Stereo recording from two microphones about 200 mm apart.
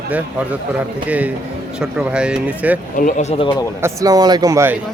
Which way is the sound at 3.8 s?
15° right (ahead or behind).